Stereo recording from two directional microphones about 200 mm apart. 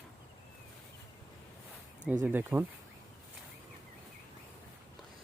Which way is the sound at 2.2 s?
10° right (ahead or behind).